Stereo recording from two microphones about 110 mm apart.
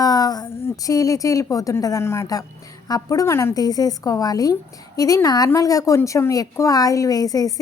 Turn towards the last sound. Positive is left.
turn(degrees=35)  # may be behind; listen again after turning